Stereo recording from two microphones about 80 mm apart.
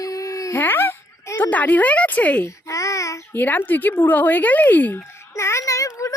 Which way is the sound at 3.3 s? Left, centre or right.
Left.